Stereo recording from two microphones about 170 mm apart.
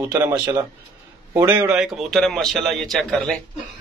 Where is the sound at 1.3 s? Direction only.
10° right (ahead or behind).